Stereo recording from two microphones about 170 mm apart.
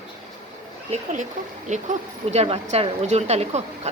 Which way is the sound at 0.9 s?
45° right (ahead or behind).